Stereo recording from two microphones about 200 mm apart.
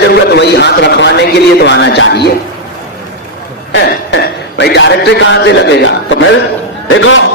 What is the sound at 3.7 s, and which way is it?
A man's voice, 55° left (ahead or behind).